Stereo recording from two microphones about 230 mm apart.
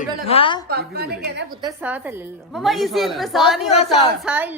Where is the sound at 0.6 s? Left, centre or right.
Right.